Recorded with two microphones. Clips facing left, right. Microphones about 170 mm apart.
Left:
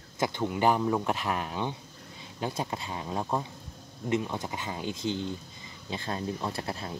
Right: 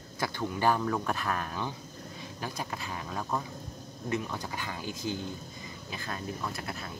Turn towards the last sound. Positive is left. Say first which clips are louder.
# left 3 dB
turn(degrees=30)  # may be behind; listen again after turning